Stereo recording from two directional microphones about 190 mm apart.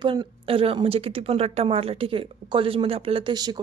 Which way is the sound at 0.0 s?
25° right (ahead or behind).